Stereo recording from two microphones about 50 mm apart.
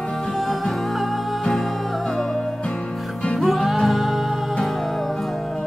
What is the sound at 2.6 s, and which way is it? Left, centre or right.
Music, left.